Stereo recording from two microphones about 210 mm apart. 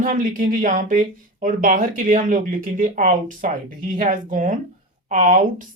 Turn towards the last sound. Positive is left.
turn(degrees=-35)  # may be behind; listen again after turning